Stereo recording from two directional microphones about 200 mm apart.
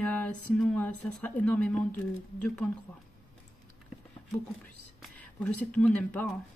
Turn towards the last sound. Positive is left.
turn(degrees=5)  # may be behind; listen again after turning